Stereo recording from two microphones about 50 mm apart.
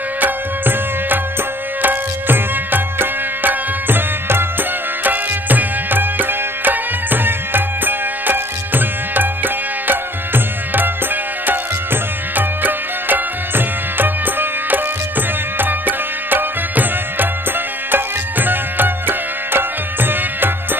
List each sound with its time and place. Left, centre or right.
0.2 s music: right